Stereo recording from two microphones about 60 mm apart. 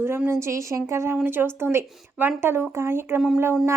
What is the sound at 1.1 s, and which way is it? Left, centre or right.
A woman's voice, right.